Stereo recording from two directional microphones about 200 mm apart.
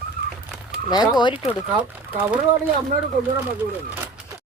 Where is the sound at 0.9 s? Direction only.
20° left (ahead or behind).